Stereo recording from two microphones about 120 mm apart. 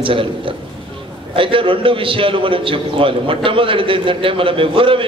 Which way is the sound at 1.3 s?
45° right (ahead or behind).